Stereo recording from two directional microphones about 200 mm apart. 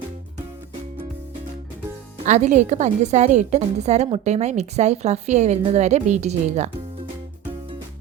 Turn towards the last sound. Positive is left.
turn(degrees=-35)  # may be behind; listen again after turning